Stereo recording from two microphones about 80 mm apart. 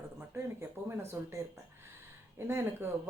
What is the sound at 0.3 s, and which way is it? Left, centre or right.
Speech, right.